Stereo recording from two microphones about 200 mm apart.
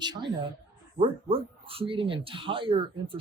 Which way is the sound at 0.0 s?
20° right (ahead or behind).